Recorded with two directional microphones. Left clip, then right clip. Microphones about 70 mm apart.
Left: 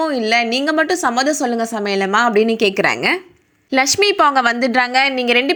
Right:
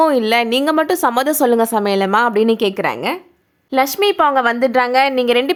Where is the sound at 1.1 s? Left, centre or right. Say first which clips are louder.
Right 3 dB; right.